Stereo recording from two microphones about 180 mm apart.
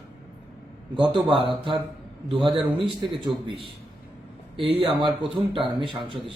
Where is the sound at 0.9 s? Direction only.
30° right (ahead or behind).